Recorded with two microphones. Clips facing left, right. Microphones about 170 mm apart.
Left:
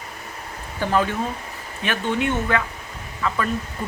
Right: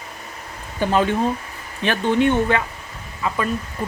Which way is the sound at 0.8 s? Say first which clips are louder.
Right 3 dB; 20° right (ahead or behind).